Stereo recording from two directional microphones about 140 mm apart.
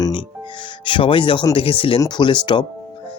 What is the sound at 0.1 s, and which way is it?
Music, 35° left (ahead or behind).